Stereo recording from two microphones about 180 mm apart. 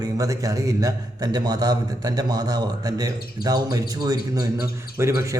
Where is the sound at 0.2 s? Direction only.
20° right (ahead or behind).